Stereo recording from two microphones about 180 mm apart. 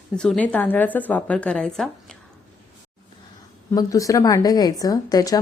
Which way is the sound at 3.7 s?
20° left (ahead or behind).